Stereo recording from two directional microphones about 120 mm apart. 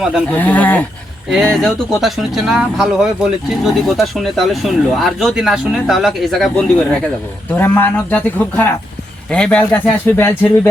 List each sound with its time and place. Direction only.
0.3 s speech: 15° left (ahead or behind)
1.3 s speech: centre (ahead or behind)
7.5 s speech: 15° left (ahead or behind)